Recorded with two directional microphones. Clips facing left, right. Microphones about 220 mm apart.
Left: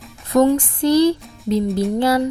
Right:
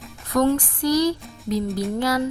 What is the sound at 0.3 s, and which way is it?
Speech, 20° left (ahead or behind).